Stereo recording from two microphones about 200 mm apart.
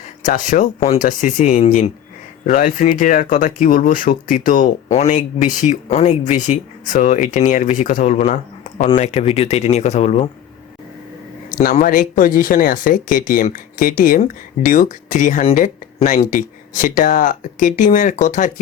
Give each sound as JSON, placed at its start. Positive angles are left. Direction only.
{"t": 0.2, "sound": "speech", "side_deg": 40}
{"t": 11.5, "sound": "speech", "side_deg": 45}